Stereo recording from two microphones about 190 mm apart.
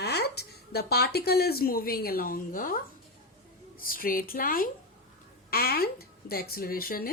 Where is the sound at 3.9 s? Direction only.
50° left (ahead or behind).